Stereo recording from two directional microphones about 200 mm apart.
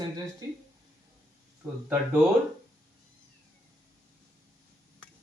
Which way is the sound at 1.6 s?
10° right (ahead or behind).